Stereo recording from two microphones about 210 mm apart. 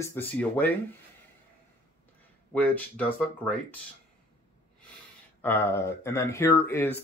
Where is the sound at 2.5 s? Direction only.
5° left (ahead or behind).